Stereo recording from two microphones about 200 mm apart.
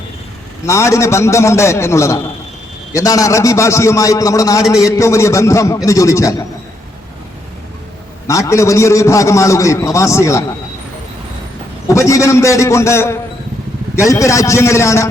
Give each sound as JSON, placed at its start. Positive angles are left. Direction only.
{"t": 0.6, "sound": "a man's voice", "side_deg": 15}
{"t": 8.3, "sound": "a man's voice", "side_deg": 15}
{"t": 11.9, "sound": "a man's voice", "side_deg": 15}